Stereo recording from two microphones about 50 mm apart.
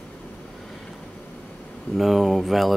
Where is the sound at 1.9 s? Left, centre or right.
Centre.